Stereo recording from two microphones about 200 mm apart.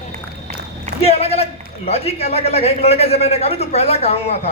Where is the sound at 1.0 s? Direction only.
30° left (ahead or behind).